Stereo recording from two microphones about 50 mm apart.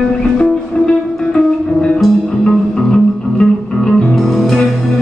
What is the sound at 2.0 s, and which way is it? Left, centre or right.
Music, centre.